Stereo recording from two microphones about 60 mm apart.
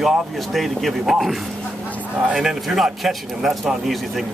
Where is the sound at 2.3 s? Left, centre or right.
Centre.